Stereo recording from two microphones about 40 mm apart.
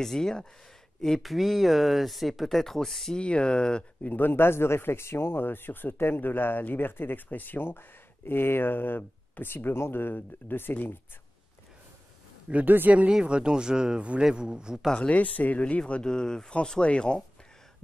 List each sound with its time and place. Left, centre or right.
0.0 s speech: centre
1.2 s speech: centre
3.2 s speech: left
4.2 s a man's voice: left
5.4 s speech: left
12.6 s speech: right
13.2 s speech: right
15.0 s speech: left
15.9 s speech: left